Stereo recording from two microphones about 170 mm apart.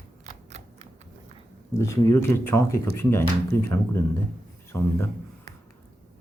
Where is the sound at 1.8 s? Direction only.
15° left (ahead or behind).